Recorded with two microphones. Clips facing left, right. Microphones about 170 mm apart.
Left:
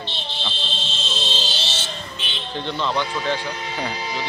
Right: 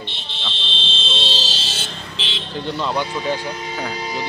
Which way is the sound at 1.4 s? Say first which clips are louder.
Left 1 dB; 90° right.